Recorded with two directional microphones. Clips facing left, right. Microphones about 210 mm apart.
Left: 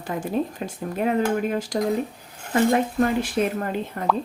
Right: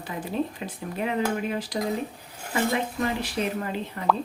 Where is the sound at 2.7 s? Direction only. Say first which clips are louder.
Left 6 dB; 50° left (ahead or behind).